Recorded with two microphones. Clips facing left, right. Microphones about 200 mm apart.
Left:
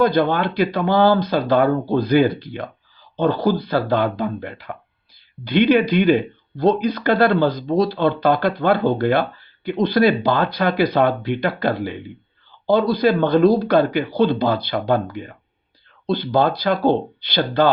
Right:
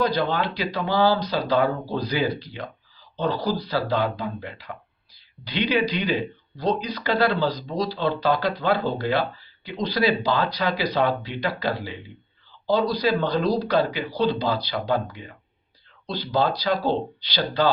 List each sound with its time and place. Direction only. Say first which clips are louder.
0.0 s speech: left 6 dB; 55° left (ahead or behind)